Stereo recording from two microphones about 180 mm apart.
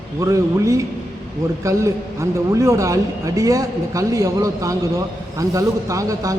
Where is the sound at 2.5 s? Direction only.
15° right (ahead or behind).